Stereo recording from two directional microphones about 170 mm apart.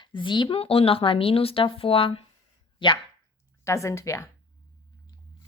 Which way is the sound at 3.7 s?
15° left (ahead or behind).